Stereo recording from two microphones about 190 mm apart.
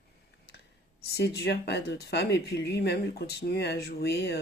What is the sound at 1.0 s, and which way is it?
Speech, 55° left (ahead or behind).